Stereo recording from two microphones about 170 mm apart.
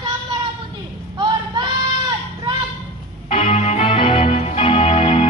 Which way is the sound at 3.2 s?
35° left (ahead or behind).